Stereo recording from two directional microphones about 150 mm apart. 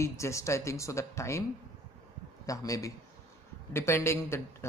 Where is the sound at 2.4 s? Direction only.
20° left (ahead or behind).